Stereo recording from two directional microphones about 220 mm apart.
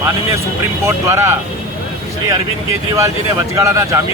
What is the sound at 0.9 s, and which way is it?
Speech, 15° right (ahead or behind).